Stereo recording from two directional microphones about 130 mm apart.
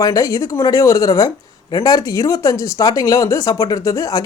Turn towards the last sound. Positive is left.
turn(degrees=25)  # may be behind; listen again after turning